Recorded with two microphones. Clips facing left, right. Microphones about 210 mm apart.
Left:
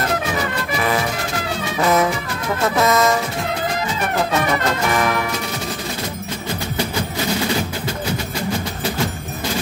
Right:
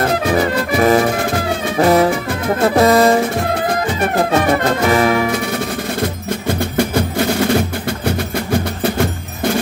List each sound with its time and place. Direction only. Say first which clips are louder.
0.7 s music: right 9 dB; 45° right (ahead or behind)
4.8 s music: right 8 dB; 35° right (ahead or behind)